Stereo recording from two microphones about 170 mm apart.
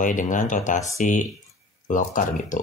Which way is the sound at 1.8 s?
50° left (ahead or behind).